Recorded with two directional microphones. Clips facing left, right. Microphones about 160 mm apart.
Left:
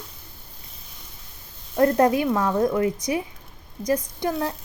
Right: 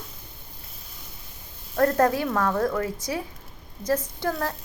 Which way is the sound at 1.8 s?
20° left (ahead or behind).